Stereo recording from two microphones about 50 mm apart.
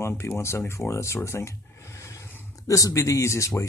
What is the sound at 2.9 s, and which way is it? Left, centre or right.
Speech, left.